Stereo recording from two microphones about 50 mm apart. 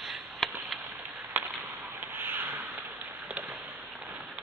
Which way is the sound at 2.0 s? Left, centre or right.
Right.